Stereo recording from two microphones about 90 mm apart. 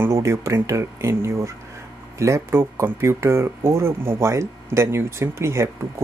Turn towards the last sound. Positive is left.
turn(degrees=-30)  # may be behind; listen again after turning